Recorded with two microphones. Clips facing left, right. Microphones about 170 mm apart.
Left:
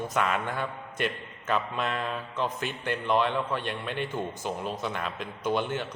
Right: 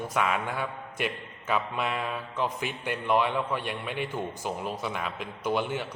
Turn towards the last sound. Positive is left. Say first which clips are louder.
# even
turn(degrees=-10)  # may be behind; listen again after turning